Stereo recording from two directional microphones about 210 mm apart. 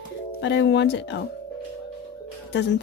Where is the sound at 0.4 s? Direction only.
55° left (ahead or behind).